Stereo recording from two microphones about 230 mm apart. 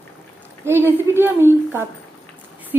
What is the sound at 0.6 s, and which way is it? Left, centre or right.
Speech, centre.